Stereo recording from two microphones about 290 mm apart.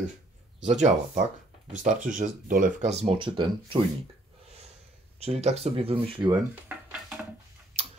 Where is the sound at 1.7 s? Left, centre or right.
Right.